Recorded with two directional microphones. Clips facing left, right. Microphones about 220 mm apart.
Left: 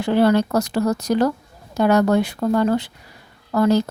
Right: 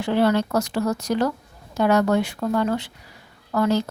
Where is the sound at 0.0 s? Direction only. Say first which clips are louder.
Left 3 dB; 40° left (ahead or behind).